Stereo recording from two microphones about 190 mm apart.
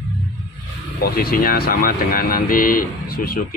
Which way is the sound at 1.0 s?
55° left (ahead or behind).